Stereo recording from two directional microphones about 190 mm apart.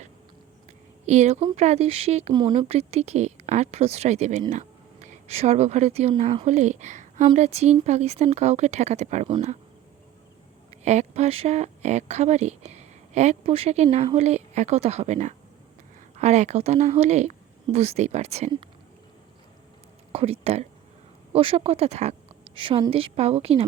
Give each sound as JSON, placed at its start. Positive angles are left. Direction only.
{"t": 1.0, "sound": "speech", "side_deg": -35}
{"t": 10.7, "sound": "speech", "side_deg": -35}
{"t": 20.1, "sound": "speech", "side_deg": -30}